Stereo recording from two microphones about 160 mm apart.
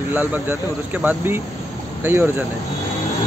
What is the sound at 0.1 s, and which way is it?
Speech, 15° right (ahead or behind).